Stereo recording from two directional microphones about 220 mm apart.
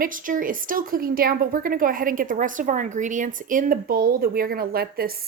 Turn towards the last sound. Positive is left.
turn(degrees=-45)  # may be behind; listen again after turning